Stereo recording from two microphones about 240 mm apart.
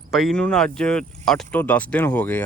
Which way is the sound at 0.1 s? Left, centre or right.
Centre.